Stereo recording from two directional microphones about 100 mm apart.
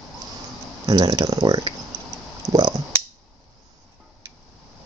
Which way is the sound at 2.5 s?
40° right (ahead or behind).